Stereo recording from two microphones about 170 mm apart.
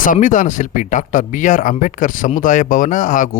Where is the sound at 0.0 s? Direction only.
50° left (ahead or behind).